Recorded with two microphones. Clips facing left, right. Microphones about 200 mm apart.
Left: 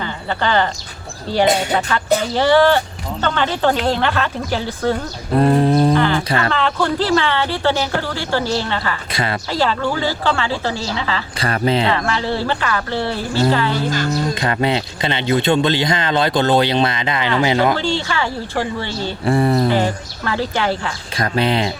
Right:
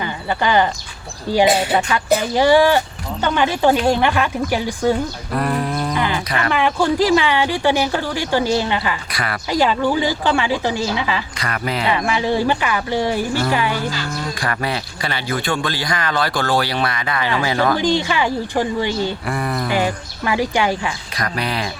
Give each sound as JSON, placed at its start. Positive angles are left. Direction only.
{"t": 0.0, "sound": "speech", "side_deg": -15}
{"t": 1.7, "sound": "speech", "side_deg": -15}
{"t": 5.3, "sound": "a sound", "side_deg": 25}
{"t": 5.9, "sound": "speech", "side_deg": -15}
{"t": 9.1, "sound": "speech", "side_deg": 25}
{"t": 9.5, "sound": "speech", "side_deg": -15}
{"t": 11.3, "sound": "speech", "side_deg": 30}
{"t": 11.9, "sound": "speech", "side_deg": -15}
{"t": 14.1, "sound": "speech", "side_deg": 25}
{"t": 17.7, "sound": "speech", "side_deg": -15}
{"t": 19.2, "sound": "speech", "side_deg": 30}
{"t": 19.7, "sound": "speech", "side_deg": -15}
{"t": 21.2, "sound": "speech", "side_deg": 25}